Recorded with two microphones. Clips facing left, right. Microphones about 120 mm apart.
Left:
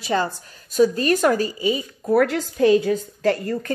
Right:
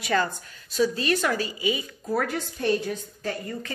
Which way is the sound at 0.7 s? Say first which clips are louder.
Left 6 dB; 45° left (ahead or behind).